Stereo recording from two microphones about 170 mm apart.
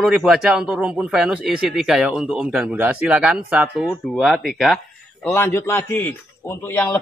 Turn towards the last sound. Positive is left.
turn(degrees=10)  # may be behind; listen again after turning